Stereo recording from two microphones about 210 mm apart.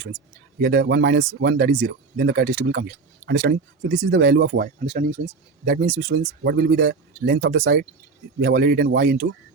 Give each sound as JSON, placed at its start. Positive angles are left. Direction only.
{"t": 0.6, "sound": "speech", "side_deg": -50}
{"t": 4.9, "sound": "speech", "side_deg": -30}
{"t": 5.6, "sound": "speech", "side_deg": -45}